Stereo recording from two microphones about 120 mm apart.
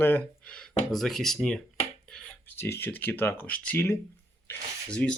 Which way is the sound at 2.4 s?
20° left (ahead or behind).